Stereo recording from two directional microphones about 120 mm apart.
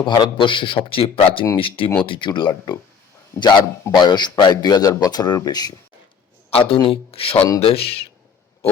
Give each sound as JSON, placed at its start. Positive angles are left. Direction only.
{"t": 0.0, "sound": "a man's voice", "side_deg": 40}
{"t": 3.3, "sound": "speech", "side_deg": 20}
{"t": 3.9, "sound": "speech", "side_deg": 35}
{"t": 6.5, "sound": "a man's voice", "side_deg": 50}